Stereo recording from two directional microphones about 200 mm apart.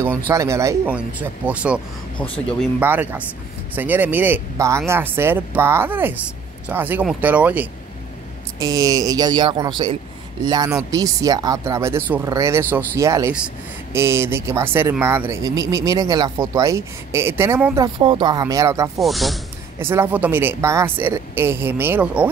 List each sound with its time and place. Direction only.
0.3 s speech: 15° right (ahead or behind)
2.1 s speech: 5° left (ahead or behind)
2.8 s speech: 10° right (ahead or behind)
17.8 s speech: 25° right (ahead or behind)
18.9 s speech: centre (ahead or behind)
19.8 s speech: 10° right (ahead or behind)